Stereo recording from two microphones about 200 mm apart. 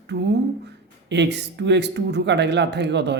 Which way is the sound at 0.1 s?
60° right (ahead or behind).